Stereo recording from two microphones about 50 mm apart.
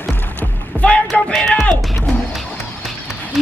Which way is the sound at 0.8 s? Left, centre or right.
Left.